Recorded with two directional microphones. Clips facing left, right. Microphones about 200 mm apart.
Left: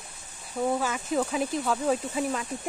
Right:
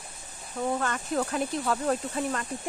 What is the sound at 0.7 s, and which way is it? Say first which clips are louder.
Speech: left 1 dB; 5° left (ahead or behind).